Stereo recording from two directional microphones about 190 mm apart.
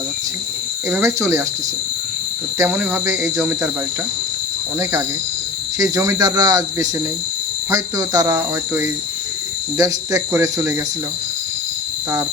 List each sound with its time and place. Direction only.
0.9 s speech: 15° right (ahead or behind)
2.6 s speech: 10° right (ahead or behind)
4.8 s speech: 15° right (ahead or behind)